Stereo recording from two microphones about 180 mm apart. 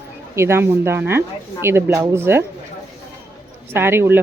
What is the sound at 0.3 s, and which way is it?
A woman's voice, 15° right (ahead or behind).